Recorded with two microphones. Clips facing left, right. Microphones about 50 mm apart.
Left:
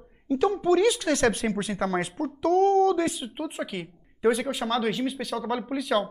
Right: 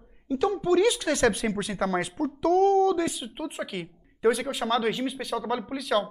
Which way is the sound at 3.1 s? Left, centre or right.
Centre.